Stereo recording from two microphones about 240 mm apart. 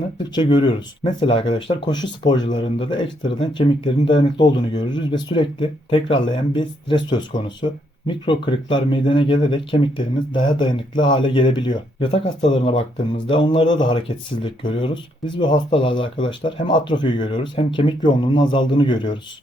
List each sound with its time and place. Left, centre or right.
0.3 s speech: centre